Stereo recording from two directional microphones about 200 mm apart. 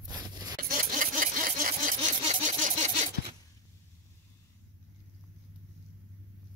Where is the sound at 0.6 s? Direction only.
45° right (ahead or behind).